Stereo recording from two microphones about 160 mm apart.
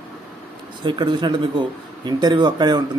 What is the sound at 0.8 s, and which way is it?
Speech, 30° right (ahead or behind).